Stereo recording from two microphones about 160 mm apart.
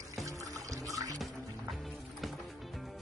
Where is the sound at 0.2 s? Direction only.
20° right (ahead or behind).